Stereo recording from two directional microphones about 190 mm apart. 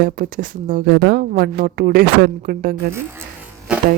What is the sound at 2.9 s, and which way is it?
Electric shaver, 10° right (ahead or behind).